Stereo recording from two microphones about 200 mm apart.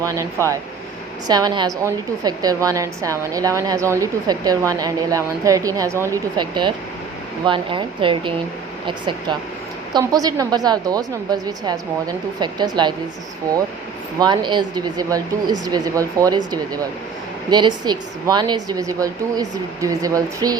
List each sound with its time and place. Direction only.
0.0 s a woman's voice: 15° right (ahead or behind)
9.9 s a woman's voice: 20° right (ahead or behind)
14.2 s a woman's voice: 20° right (ahead or behind)